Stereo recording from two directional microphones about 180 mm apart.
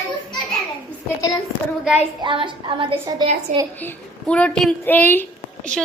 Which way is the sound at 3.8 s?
5° left (ahead or behind).